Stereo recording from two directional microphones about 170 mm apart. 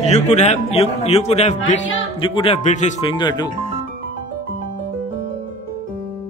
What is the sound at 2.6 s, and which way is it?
Speech, 45° left (ahead or behind).